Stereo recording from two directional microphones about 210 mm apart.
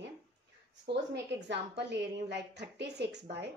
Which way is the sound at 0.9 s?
55° right (ahead or behind).